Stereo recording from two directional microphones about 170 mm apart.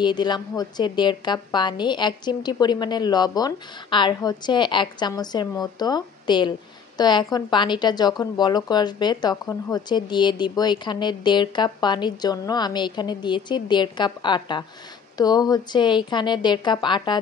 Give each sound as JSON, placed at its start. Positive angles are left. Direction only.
{"t": 0.0, "sound": "speech", "side_deg": 25}